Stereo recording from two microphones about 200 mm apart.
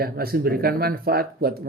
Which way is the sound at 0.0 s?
50° right (ahead or behind).